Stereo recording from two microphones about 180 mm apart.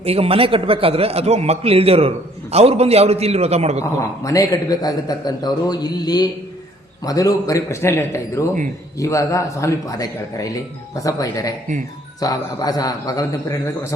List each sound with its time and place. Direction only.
0.0 s a man's voice: 35° right (ahead or behind)
4.2 s a man's voice: 20° left (ahead or behind)